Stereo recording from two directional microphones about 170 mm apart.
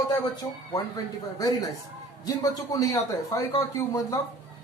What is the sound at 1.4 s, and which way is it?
Speech, 20° left (ahead or behind).